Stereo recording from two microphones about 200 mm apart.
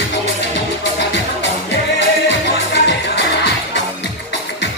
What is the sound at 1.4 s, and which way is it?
Music, 65° left (ahead or behind).